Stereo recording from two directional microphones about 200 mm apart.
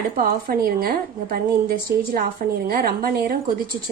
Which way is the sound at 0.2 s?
45° right (ahead or behind).